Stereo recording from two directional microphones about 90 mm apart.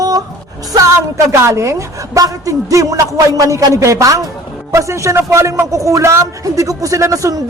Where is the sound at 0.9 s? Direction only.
35° right (ahead or behind).